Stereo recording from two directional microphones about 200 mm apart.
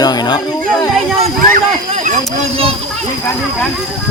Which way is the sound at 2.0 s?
30° right (ahead or behind).